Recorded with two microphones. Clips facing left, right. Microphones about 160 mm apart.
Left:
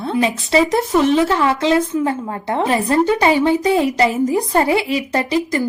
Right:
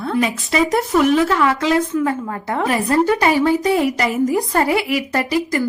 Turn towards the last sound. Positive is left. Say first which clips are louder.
# left 1 dB
turn(degrees=25)  # may be behind; listen again after turning